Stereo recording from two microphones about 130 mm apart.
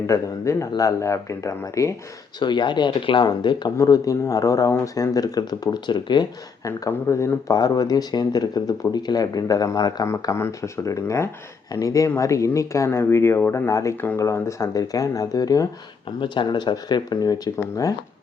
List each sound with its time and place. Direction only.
0.1 s speech: 25° left (ahead or behind)
2.4 s speech: 35° left (ahead or behind)
6.7 s speech: 25° left (ahead or behind)
16.0 s speech: 40° left (ahead or behind)